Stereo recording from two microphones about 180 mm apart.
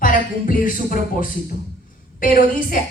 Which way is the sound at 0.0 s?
50° left (ahead or behind).